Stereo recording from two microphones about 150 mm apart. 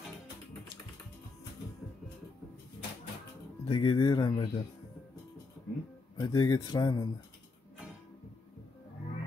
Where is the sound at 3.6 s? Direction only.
35° left (ahead or behind).